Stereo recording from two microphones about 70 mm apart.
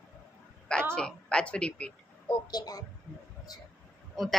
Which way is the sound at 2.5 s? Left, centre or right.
Left.